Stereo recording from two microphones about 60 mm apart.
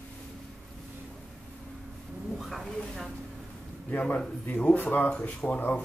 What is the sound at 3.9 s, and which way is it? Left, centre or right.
Speech, left.